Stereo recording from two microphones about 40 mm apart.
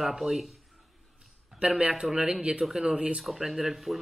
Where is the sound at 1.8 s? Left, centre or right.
Right.